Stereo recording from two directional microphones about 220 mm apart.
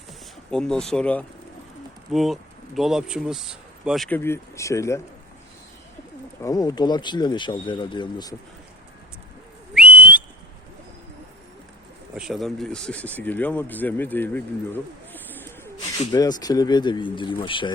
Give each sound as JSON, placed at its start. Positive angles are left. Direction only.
{"t": 0.5, "sound": "speech", "side_deg": 5}
{"t": 6.4, "sound": "speech", "side_deg": 15}
{"t": 9.7, "sound": "whistle", "side_deg": -5}
{"t": 12.1, "sound": "speech", "side_deg": 0}